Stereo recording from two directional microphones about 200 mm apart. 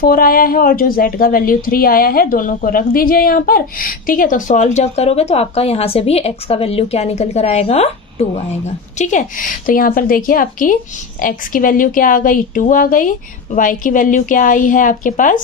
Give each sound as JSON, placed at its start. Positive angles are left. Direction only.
{"t": 0.0, "sound": "a woman's voice", "side_deg": 45}